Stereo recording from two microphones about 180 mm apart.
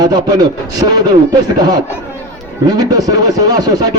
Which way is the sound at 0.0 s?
20° right (ahead or behind).